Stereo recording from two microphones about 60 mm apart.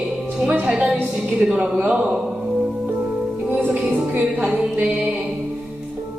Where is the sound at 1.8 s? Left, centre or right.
Centre.